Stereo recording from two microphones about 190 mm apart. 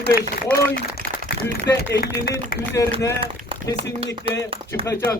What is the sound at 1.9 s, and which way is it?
A man's voice, 15° left (ahead or behind).